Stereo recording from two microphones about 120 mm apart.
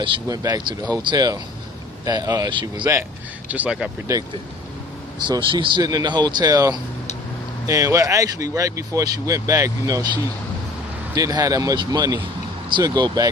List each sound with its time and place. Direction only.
0.3 s speech: 30° right (ahead or behind)
3.5 s speech: 10° right (ahead or behind)
4.1 s speech: 30° right (ahead or behind)
5.3 s speech: 40° right (ahead or behind)
11.1 s speech: 30° right (ahead or behind)